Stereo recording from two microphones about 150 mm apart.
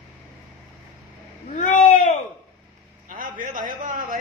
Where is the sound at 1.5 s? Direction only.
55° left (ahead or behind).